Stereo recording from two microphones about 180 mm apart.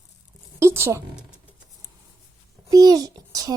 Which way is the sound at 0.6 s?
15° right (ahead or behind).